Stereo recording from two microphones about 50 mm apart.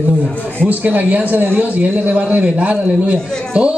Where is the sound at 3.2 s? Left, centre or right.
Centre.